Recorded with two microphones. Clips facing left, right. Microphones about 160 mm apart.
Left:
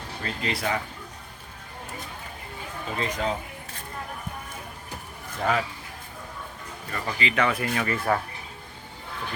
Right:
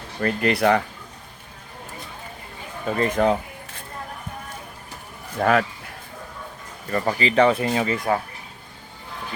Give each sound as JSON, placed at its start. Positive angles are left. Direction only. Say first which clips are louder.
{"t": 0.2, "sound": "speech", "louder": "right 10 dB", "side_deg": -60}
{"t": 3.0, "sound": "speech", "louder": "right 9 dB", "side_deg": -60}
{"t": 5.4, "sound": "speech", "louder": "right 6 dB", "side_deg": -60}
{"t": 6.9, "sound": "speech", "louder": "right 8 dB", "side_deg": -40}